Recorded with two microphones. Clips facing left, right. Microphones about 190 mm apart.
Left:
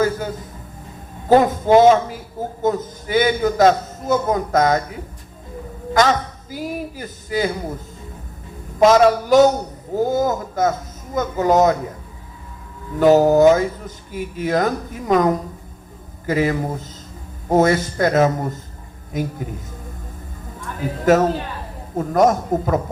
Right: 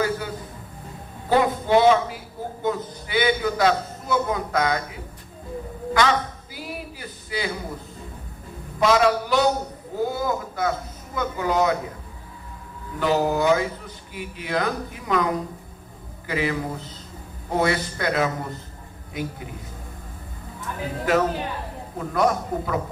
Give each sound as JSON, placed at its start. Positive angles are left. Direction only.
{"t": 1.3, "sound": "a man's voice", "side_deg": 45}
{"t": 5.9, "sound": "a sound", "side_deg": 45}
{"t": 8.8, "sound": "speech", "side_deg": 45}
{"t": 13.0, "sound": "speech", "side_deg": 45}
{"t": 21.0, "sound": "speech", "side_deg": 45}